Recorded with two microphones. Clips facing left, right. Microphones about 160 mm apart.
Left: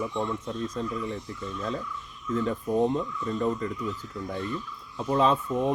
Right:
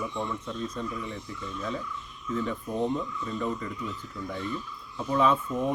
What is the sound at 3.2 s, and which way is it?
Speech, 40° left (ahead or behind).